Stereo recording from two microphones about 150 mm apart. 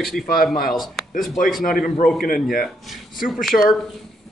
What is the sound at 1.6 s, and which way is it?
Speech, 70° left (ahead or behind).